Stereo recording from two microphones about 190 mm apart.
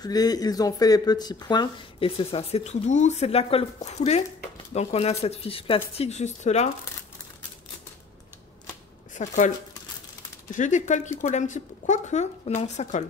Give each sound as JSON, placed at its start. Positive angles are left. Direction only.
{"t": 0.0, "sound": "a woman's voice", "side_deg": 20}
{"t": 9.1, "sound": "speech", "side_deg": 40}
{"t": 10.5, "sound": "a woman's voice", "side_deg": 40}